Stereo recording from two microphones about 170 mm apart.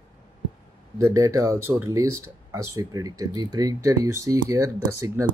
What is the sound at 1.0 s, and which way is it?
Speech, 15° right (ahead or behind).